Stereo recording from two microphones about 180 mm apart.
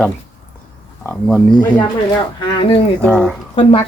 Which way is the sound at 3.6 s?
30° left (ahead or behind).